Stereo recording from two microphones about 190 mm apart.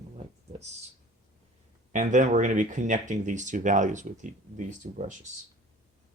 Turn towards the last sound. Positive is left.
turn(degrees=-35)  # may be behind; listen again after turning